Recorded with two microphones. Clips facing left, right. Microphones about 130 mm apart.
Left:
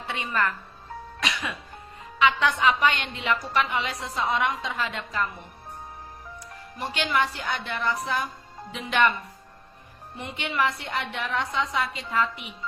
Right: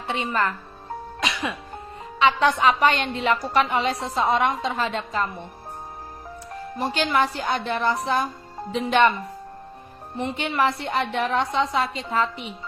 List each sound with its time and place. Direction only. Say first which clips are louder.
0.1 s a woman's voice: right 3 dB; 30° right (ahead or behind)
6.5 s a woman's voice: right 7 dB; 35° right (ahead or behind)
10.2 s a woman's voice: right 4 dB; 35° right (ahead or behind)